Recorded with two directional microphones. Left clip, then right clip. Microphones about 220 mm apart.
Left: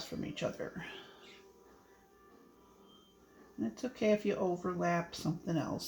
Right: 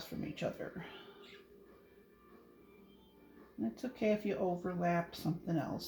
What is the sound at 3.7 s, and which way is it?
Speech, 30° left (ahead or behind).